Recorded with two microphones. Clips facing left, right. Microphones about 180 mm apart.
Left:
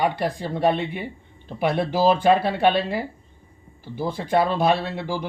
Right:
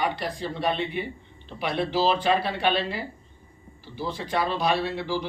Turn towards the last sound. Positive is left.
turn(degrees=50)  # may be behind; listen again after turning